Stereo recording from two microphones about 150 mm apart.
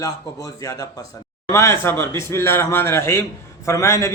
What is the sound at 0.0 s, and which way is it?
A man's voice, 25° left (ahead or behind).